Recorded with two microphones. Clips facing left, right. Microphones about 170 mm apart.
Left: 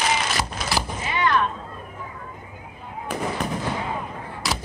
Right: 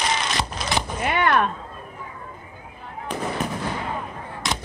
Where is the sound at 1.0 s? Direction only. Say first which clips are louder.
Right 3 dB; 60° right (ahead or behind).